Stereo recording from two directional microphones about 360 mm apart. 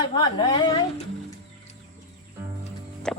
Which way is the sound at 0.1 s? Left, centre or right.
Centre.